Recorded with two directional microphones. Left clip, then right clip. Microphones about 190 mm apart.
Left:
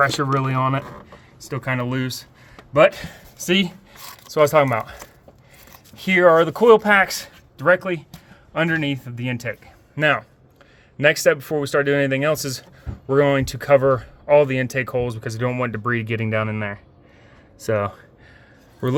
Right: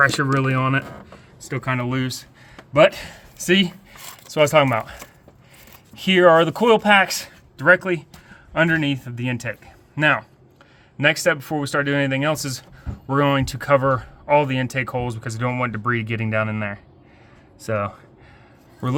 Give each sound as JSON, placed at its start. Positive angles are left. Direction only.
{"t": 0.1, "sound": "speech", "side_deg": 0}
{"t": 17.7, "sound": "speech", "side_deg": 20}